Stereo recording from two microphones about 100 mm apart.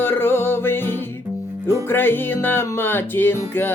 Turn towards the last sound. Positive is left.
turn(degrees=20)  # may be behind; listen again after turning